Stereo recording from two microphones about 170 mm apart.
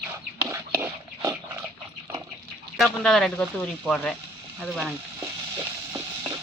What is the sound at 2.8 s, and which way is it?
Speech, centre (ahead or behind).